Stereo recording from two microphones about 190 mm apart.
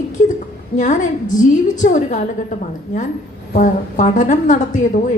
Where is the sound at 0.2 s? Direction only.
40° left (ahead or behind).